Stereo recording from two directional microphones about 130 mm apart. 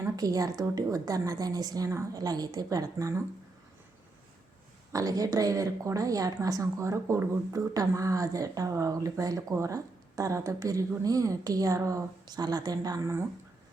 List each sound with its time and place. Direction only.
0.2 s a woman's voice: 25° right (ahead or behind)
4.9 s a woman's voice: 25° right (ahead or behind)